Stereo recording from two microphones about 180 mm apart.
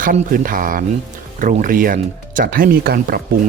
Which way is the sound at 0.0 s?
50° right (ahead or behind).